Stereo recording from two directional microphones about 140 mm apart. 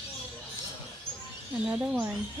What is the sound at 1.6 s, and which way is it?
Speech, 10° right (ahead or behind).